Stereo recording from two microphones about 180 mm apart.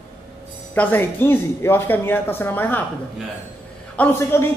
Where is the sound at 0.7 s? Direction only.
10° left (ahead or behind).